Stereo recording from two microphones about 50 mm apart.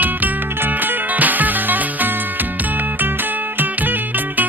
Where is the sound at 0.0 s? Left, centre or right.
Right.